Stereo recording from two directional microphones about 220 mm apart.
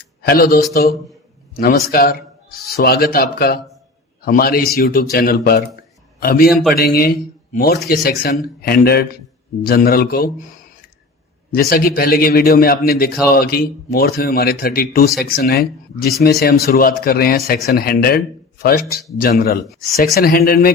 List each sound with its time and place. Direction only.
0.2 s a man's voice: 45° left (ahead or behind)
11.5 s speech: 40° left (ahead or behind)